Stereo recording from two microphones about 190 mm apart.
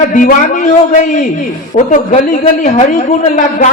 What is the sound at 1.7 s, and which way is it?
A woman's voice, 40° left (ahead or behind).